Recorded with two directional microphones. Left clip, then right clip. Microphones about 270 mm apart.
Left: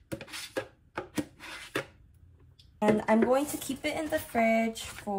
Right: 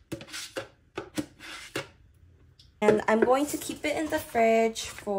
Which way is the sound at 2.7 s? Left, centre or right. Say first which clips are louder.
Right 3 dB; centre.